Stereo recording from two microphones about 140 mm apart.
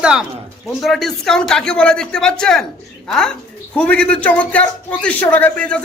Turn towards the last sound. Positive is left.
turn(degrees=10)  # may be behind; listen again after turning